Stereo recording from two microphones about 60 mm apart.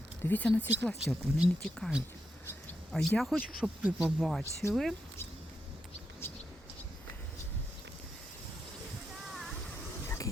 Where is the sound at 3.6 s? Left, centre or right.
Centre.